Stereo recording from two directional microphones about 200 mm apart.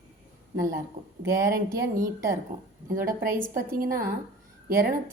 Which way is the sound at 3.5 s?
45° right (ahead or behind).